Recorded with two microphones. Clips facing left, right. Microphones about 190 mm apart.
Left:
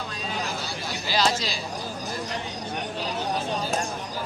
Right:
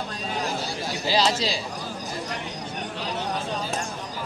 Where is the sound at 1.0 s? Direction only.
30° right (ahead or behind).